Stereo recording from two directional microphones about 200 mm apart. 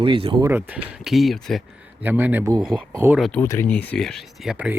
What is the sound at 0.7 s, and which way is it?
Speech, centre (ahead or behind).